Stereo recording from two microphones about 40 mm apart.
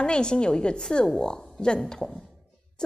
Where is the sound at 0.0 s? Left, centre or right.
Left.